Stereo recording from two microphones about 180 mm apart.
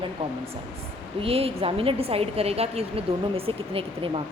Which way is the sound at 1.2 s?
35° right (ahead or behind).